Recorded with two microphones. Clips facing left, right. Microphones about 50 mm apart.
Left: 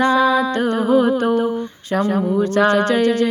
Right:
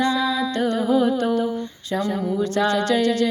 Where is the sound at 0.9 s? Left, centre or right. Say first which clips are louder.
Left 5 dB; left.